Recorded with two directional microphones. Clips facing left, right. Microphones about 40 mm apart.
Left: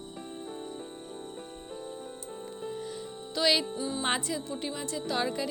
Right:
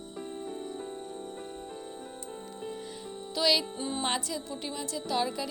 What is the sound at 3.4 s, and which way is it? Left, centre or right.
Music, centre.